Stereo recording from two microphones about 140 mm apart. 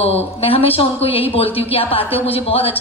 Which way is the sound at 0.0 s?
45° left (ahead or behind).